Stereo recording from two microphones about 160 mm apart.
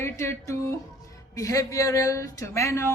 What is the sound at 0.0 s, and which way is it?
A woman's voice, 15° left (ahead or behind).